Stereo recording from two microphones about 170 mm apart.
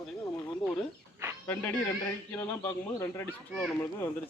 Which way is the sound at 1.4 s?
10° left (ahead or behind).